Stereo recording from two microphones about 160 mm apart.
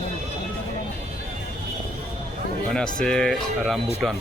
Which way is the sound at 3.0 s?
5° left (ahead or behind).